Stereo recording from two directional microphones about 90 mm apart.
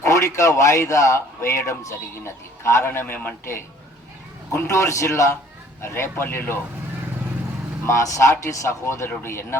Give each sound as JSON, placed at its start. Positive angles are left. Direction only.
{"t": 0.0, "sound": "a man's voice", "side_deg": 35}
{"t": 4.5, "sound": "a man's voice", "side_deg": 35}
{"t": 7.9, "sound": "a man's voice", "side_deg": 35}